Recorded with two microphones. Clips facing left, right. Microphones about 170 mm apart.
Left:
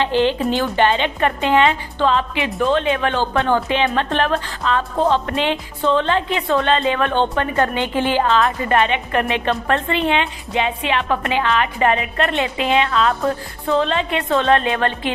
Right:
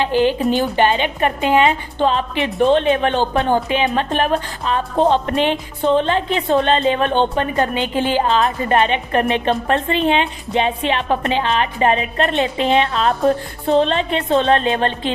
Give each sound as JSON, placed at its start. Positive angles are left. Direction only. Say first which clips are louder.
{"t": 0.0, "sound": "a woman's voice", "louder": "right 1 dB", "side_deg": -10}